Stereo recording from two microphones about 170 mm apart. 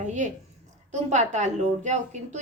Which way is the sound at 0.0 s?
45° right (ahead or behind).